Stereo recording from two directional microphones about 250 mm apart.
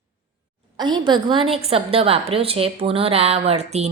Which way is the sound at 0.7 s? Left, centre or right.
Centre.